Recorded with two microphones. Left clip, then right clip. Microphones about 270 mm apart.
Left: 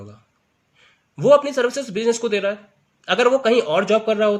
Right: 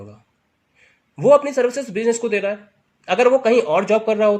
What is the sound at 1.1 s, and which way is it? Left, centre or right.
Speech, centre.